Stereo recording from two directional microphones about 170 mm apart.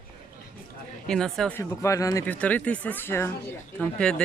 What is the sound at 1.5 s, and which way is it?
Speech, 20° left (ahead or behind).